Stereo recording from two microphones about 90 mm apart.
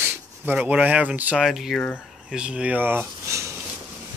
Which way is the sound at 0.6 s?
15° right (ahead or behind).